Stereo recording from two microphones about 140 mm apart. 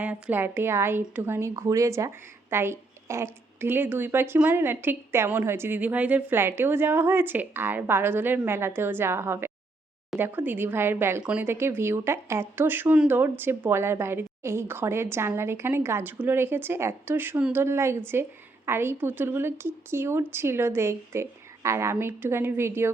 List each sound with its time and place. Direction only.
0.0 s a woman's voice: 10° right (ahead or behind)